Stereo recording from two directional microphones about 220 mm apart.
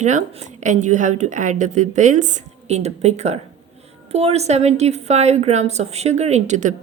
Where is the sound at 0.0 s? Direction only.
35° right (ahead or behind).